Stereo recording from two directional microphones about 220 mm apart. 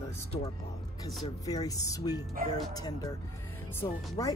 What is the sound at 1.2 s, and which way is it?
Speech, 15° left (ahead or behind).